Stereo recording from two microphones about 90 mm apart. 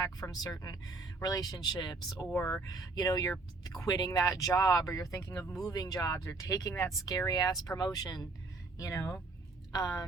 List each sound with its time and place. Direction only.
0.0 s speech: 45° left (ahead or behind)
2.5 s speech: 40° left (ahead or behind)
8.8 s speech: 35° left (ahead or behind)